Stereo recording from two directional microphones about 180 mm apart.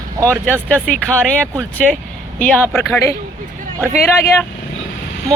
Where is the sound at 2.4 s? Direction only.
10° left (ahead or behind).